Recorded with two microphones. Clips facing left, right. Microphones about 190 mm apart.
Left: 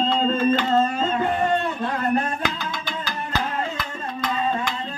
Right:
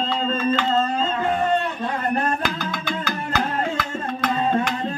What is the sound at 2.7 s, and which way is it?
Music, 55° right (ahead or behind).